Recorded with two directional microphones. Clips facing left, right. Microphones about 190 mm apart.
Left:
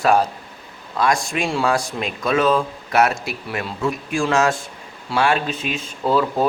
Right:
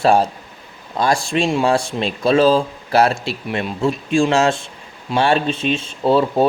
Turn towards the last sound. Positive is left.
turn(degrees=-25)  # may be behind; listen again after turning